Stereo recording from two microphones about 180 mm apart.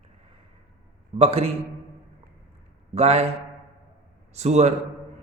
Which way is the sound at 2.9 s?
35° right (ahead or behind).